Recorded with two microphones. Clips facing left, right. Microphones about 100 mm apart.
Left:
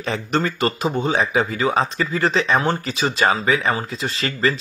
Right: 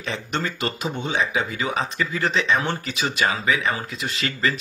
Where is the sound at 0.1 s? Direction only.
40° left (ahead or behind).